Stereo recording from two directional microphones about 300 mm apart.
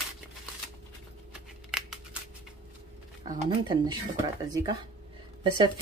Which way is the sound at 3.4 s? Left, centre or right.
Centre.